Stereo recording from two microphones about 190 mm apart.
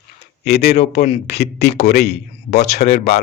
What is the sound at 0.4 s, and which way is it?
A man's voice, 55° left (ahead or behind).